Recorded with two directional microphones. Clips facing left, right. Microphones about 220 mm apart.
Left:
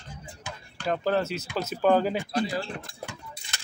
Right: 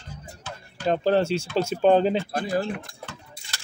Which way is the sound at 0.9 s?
30° right (ahead or behind).